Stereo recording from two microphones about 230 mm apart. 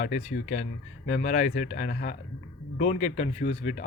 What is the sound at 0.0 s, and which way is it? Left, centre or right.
Speech, left.